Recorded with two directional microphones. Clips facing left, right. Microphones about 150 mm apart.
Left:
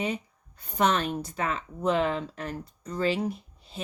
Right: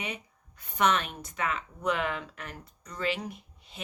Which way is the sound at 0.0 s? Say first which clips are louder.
Left 8 dB; 30° left (ahead or behind).